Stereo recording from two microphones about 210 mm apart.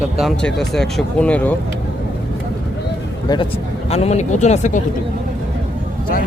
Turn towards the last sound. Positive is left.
turn(degrees=35)  # may be behind; listen again after turning